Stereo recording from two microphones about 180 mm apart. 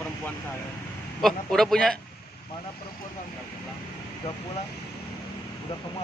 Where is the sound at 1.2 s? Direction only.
Centre (ahead or behind).